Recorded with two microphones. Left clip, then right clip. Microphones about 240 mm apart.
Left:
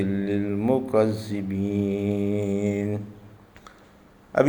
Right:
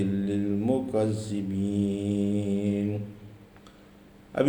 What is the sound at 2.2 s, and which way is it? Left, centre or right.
Mantra, left.